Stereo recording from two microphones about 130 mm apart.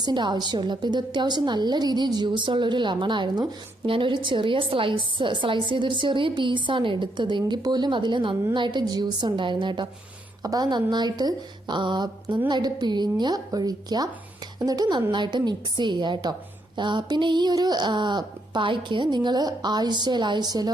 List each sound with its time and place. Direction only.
0.0 s a woman's voice: 35° right (ahead or behind)